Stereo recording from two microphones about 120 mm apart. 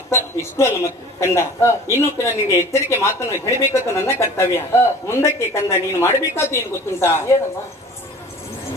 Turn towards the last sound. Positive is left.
turn(degrees=20)  # may be behind; listen again after turning